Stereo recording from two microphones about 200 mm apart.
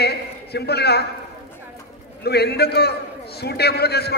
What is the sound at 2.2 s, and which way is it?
A man's voice, 55° left (ahead or behind).